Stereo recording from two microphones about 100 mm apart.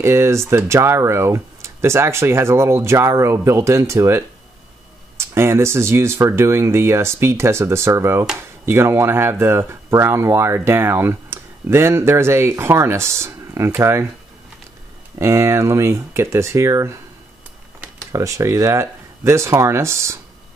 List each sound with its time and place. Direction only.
0.0 s speech: 25° right (ahead or behind)
5.3 s speech: 25° right (ahead or behind)
15.1 s speech: 30° right (ahead or behind)
18.1 s speech: 30° right (ahead or behind)